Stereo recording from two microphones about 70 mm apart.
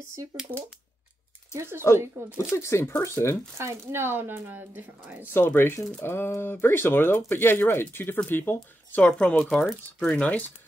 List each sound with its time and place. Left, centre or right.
1.6 s speech: right
2.5 s speech: left
3.5 s speech: right
5.3 s speech: left
8.9 s speech: centre